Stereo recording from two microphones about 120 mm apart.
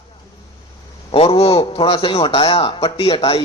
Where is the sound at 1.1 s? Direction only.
50° left (ahead or behind).